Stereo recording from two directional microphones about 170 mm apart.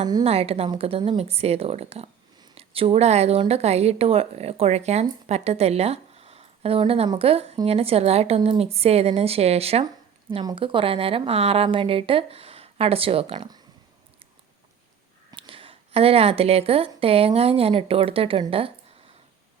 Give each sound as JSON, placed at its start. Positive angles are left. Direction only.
{"t": 0.3, "sound": "a woman's voice", "side_deg": -35}
{"t": 15.3, "sound": "speech", "side_deg": -30}